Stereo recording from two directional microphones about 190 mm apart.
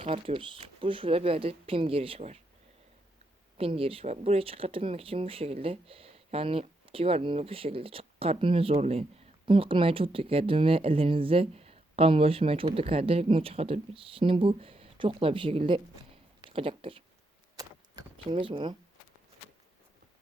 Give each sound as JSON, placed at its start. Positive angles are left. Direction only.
{"t": 0.0, "sound": "speech", "side_deg": -30}
{"t": 3.6, "sound": "speech", "side_deg": -30}
{"t": 17.6, "sound": "vehicle", "side_deg": -20}